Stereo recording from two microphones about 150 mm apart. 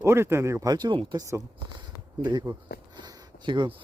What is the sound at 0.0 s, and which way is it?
Speech, 15° right (ahead or behind).